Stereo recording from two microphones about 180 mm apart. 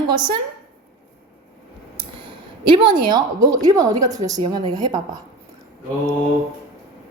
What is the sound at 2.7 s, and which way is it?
A woman's voice, 25° right (ahead or behind).